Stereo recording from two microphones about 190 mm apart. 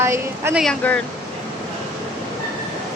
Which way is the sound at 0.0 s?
15° right (ahead or behind).